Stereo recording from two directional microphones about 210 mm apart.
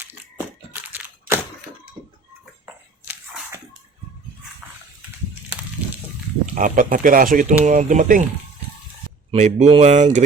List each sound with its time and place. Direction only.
0.0 s crushing: 10° right (ahead or behind)
3.0 s a sound: 10° right (ahead or behind)
6.4 s speech: 40° right (ahead or behind)
9.3 s speech: 30° right (ahead or behind)